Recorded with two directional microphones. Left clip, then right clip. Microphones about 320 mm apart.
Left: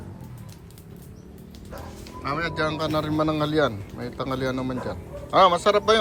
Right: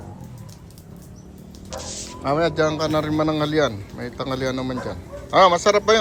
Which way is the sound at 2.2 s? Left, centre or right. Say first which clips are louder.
Right 6 dB; centre.